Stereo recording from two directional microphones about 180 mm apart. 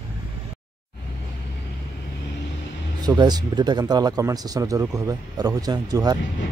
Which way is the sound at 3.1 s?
20° right (ahead or behind).